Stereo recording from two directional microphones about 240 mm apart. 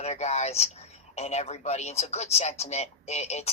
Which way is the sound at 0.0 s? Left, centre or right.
Left.